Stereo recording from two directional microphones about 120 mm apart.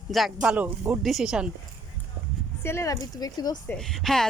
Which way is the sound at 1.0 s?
5° right (ahead or behind).